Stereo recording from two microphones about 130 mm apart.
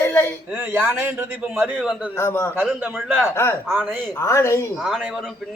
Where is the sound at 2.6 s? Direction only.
10° right (ahead or behind).